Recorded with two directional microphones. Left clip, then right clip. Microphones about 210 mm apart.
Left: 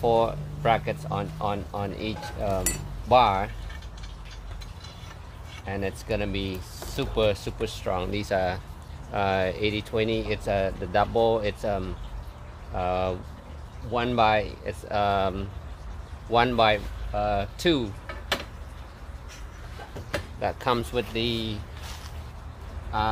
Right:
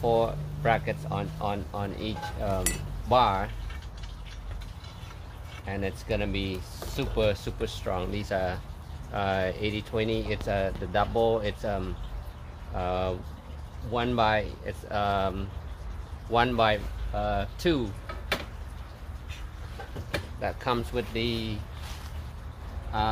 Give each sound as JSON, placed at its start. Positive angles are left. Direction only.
{"t": 0.0, "sound": "speech", "side_deg": 25}
{"t": 5.7, "sound": "speech", "side_deg": 20}
{"t": 20.3, "sound": "speech", "side_deg": 30}
{"t": 22.9, "sound": "speech", "side_deg": 15}